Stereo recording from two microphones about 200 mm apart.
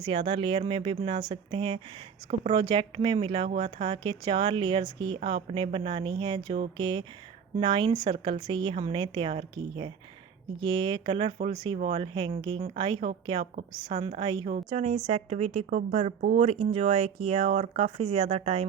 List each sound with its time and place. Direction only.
0.1 s a woman's voice: 25° right (ahead or behind)